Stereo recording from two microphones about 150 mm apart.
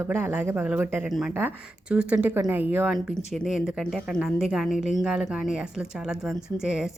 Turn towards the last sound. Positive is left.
turn(degrees=-5)  # may be behind; listen again after turning